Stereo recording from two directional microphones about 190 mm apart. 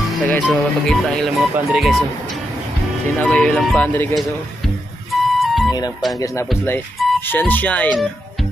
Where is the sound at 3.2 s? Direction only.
5° left (ahead or behind).